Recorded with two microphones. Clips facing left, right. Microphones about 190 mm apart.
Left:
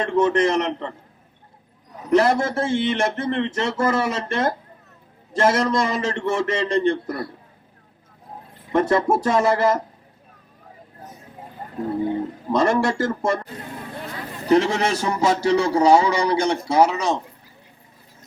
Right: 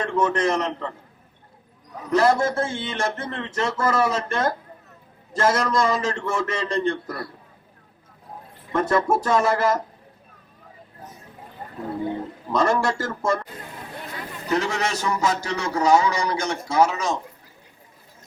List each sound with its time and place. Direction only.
0.0 s speech: 20° left (ahead or behind)
2.1 s speech: 20° left (ahead or behind)
8.7 s speech: 20° left (ahead or behind)
12.5 s speech: 20° left (ahead or behind)
14.5 s a man's voice: 35° left (ahead or behind)